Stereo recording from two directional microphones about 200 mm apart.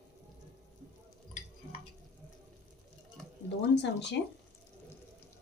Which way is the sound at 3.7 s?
60° left (ahead or behind).